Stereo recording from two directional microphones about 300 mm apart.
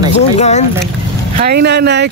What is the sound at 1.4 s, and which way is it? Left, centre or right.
Speech, right.